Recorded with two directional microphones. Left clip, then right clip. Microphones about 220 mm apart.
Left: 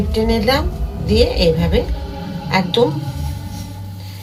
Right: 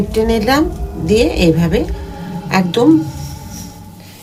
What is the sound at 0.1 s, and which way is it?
A woman's voice, 40° right (ahead or behind).